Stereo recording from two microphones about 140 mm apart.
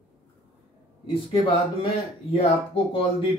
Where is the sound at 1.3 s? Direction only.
40° left (ahead or behind).